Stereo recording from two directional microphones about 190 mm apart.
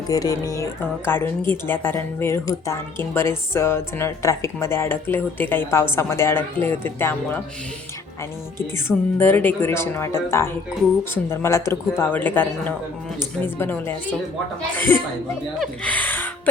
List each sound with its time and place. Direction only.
0.1 s a woman's voice: 20° left (ahead or behind)
9.1 s a woman's voice: 10° left (ahead or behind)